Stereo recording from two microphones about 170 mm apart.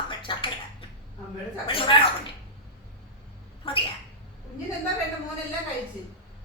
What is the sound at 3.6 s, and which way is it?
Cat, 30° left (ahead or behind).